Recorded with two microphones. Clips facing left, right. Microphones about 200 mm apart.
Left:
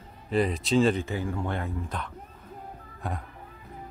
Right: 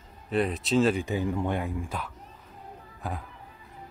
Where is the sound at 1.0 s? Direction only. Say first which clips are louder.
Right 3 dB; 15° right (ahead or behind); by 3.2 s centre (ahead or behind).